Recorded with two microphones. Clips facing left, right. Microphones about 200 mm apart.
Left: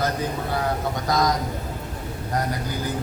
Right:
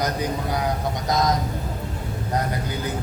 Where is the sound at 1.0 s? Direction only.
20° right (ahead or behind).